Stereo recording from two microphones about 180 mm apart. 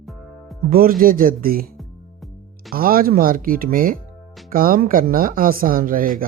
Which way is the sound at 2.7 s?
55° right (ahead or behind).